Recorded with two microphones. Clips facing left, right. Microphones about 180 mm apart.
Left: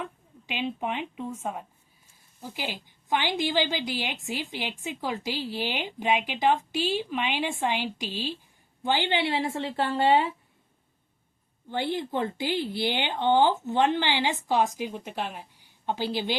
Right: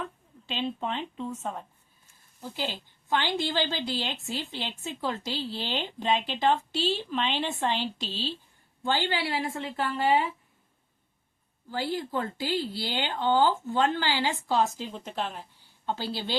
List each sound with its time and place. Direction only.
0.0 s a woman's voice: 10° left (ahead or behind); by 10.3 s 30° left (ahead or behind)
11.7 s a woman's voice: 20° left (ahead or behind)